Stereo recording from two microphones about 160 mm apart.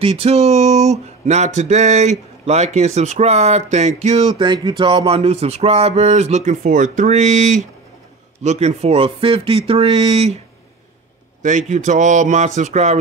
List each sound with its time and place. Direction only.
0.0 s speech: 40° right (ahead or behind)
4.4 s a sound: 30° right (ahead or behind)
11.4 s speech: 50° right (ahead or behind)